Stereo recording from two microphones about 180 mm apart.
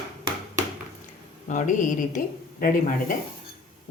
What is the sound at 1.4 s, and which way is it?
A woman's voice, 45° left (ahead or behind).